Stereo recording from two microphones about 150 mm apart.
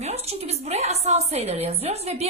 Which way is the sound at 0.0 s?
45° right (ahead or behind).